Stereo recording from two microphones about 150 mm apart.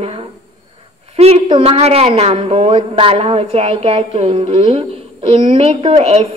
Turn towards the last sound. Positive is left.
turn(degrees=-45)  # may be behind; listen again after turning